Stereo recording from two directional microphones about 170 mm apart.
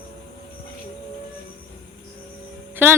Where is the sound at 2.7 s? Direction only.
10° right (ahead or behind).